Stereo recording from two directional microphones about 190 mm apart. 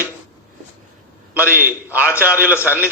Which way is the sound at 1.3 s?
10° right (ahead or behind).